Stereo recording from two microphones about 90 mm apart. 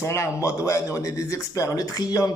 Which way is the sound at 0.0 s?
30° left (ahead or behind).